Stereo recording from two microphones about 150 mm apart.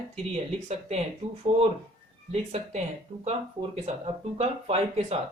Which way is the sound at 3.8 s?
40° right (ahead or behind).